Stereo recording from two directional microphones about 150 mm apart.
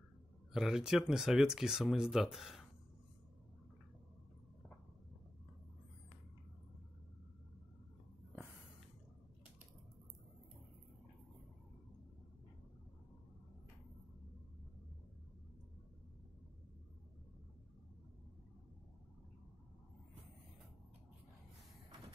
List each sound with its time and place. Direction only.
0.5 s speech: 5° right (ahead or behind)